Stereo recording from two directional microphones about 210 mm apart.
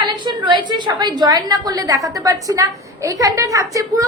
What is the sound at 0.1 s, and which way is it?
A woman's voice, 20° right (ahead or behind).